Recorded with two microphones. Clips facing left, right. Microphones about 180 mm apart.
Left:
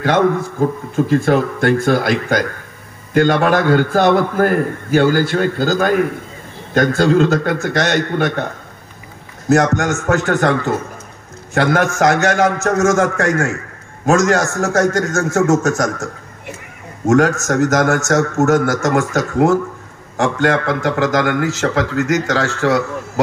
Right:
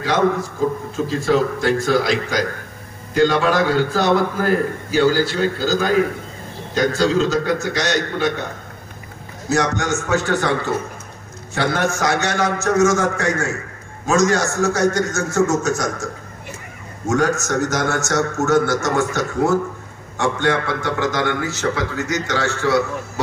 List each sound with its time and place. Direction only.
0.0 s a man's voice: 55° left (ahead or behind)
9.5 s a man's voice: 50° left (ahead or behind)
14.7 s a man's voice: 50° left (ahead or behind)
15.1 s a man's voice: 90° left
17.1 s a man's voice: 90° left